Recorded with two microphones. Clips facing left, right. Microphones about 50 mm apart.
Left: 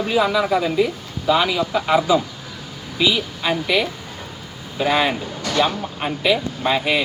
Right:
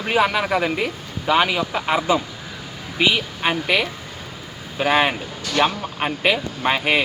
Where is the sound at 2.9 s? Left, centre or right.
Right.